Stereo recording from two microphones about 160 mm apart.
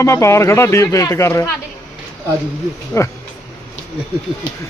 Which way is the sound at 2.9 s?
15° left (ahead or behind).